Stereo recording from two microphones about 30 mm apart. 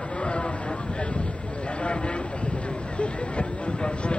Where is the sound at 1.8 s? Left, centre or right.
Left.